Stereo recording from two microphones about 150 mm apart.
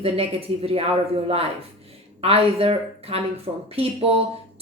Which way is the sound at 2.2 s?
40° right (ahead or behind).